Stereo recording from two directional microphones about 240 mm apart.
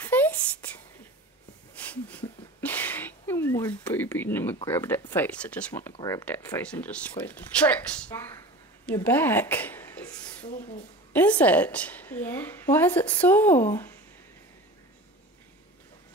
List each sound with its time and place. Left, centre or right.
0.0 s whispering: centre
1.8 s a sound: centre
4.6 s a woman's voice: centre
8.8 s a sound: centre
10.5 s speech: left
11.1 s a woman's voice: centre